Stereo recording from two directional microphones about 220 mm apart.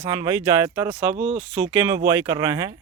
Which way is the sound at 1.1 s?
25° right (ahead or behind).